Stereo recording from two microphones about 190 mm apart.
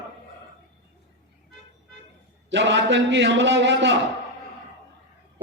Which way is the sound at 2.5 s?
70° right (ahead or behind).